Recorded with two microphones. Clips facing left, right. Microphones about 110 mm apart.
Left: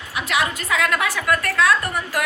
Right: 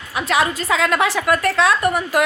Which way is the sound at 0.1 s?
35° right (ahead or behind).